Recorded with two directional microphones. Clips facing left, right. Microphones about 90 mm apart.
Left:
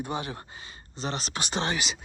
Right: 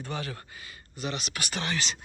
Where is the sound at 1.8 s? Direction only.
5° left (ahead or behind).